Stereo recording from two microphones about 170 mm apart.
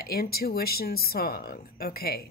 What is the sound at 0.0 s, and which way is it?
Speech, 65° left (ahead or behind).